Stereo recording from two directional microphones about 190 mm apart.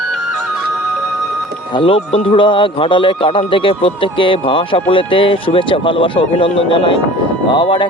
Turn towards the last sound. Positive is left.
turn(degrees=25)  # may be behind; listen again after turning